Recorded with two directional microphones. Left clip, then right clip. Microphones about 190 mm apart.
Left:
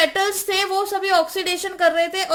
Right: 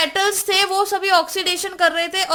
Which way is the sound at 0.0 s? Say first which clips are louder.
Even; 30° right (ahead or behind).